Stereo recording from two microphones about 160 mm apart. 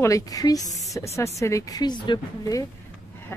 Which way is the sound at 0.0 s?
20° left (ahead or behind).